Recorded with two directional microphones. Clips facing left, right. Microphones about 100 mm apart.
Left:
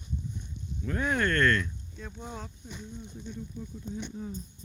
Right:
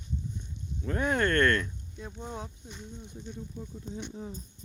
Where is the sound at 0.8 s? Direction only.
30° right (ahead or behind).